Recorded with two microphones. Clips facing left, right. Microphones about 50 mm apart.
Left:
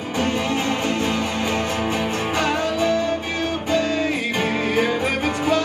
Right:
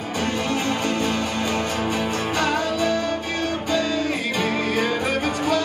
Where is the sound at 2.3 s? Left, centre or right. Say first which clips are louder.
Left 1 dB; left.